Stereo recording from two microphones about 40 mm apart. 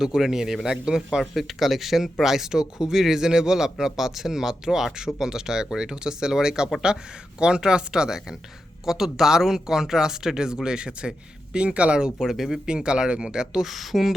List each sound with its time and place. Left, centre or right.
0.0 s speech: centre
1.3 s speech: centre; by 12.1 s right
12.2 s speech: centre
12.6 s speech: right
13.7 s speech: centre